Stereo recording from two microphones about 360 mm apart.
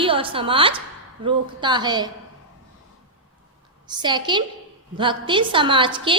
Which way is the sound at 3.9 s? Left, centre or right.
Centre.